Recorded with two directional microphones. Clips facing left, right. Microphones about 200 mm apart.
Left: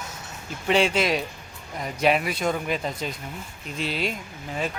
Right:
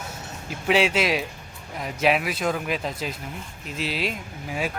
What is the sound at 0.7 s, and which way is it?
Speech, 5° right (ahead or behind).